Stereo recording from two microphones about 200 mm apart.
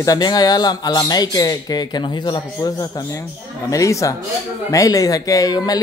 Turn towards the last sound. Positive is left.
turn(degrees=20)  # may be behind; listen again after turning